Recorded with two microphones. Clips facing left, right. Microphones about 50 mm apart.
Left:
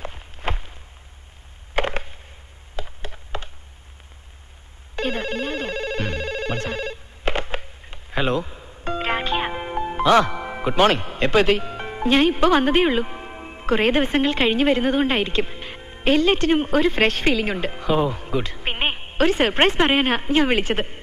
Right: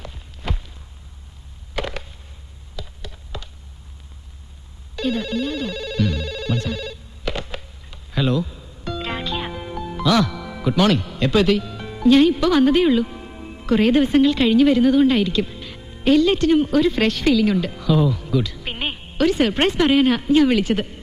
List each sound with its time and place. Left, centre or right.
0.0 s walk: left
1.7 s a sound: left
4.9 s telephone: left